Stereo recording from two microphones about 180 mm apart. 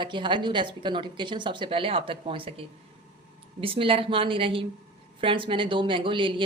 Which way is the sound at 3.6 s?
30° right (ahead or behind).